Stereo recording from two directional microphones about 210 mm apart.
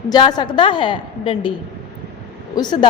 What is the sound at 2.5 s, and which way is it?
Speech, 20° left (ahead or behind).